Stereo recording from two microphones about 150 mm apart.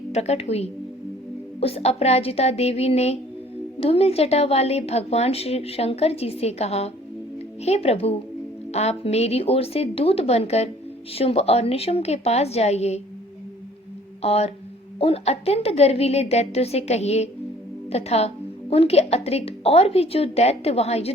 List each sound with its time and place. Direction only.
0.1 s a woman's voice: 45° left (ahead or behind)
14.2 s a woman's voice: 45° left (ahead or behind)